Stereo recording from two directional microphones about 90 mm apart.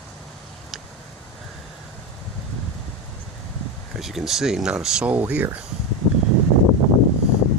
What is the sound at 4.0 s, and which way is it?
Speech, 5° right (ahead or behind).